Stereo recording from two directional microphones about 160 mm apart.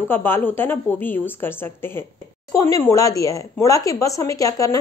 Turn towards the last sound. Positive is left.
turn(degrees=20)  # may be behind; listen again after turning